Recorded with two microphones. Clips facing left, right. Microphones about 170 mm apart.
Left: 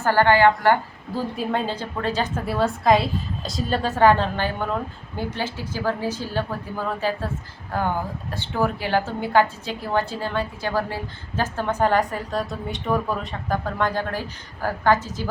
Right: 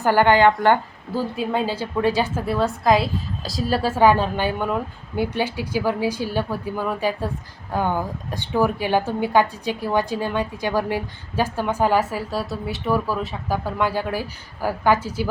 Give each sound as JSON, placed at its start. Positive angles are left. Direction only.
{"t": 0.0, "sound": "a woman's voice", "side_deg": -15}
{"t": 1.4, "sound": "a woman's voice", "side_deg": -5}
{"t": 2.5, "sound": "a woman's voice", "side_deg": 0}